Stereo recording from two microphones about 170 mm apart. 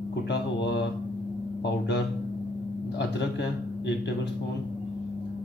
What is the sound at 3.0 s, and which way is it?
Speech, 80° left.